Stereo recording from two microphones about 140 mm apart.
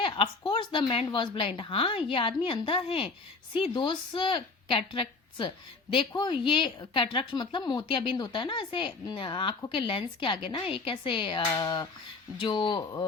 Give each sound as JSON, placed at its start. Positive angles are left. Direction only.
{"t": 0.0, "sound": "a woman's voice", "side_deg": 40}
{"t": 11.4, "sound": "a woman's voice", "side_deg": 25}